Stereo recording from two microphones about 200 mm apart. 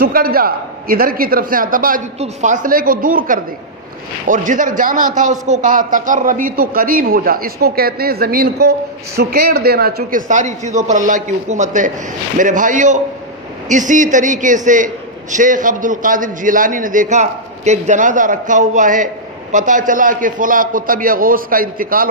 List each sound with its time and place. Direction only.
0.0 s a man's voice: 50° right (ahead or behind)